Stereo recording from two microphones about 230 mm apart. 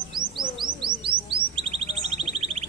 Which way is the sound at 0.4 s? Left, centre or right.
Right.